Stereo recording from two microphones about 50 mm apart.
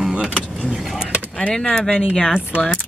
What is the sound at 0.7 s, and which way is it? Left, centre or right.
Speech, centre.